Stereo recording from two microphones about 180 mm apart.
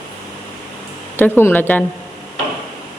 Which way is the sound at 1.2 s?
10° left (ahead or behind).